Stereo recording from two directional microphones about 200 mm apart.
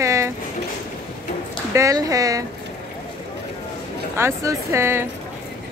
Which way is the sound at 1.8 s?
15° right (ahead or behind).